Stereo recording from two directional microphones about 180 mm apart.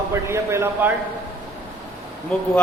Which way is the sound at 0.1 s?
15° right (ahead or behind).